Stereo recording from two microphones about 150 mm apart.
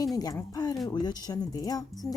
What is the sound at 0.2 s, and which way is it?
Speech, 25° left (ahead or behind).